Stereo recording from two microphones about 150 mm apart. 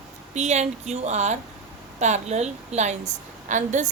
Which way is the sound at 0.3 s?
50° right (ahead or behind).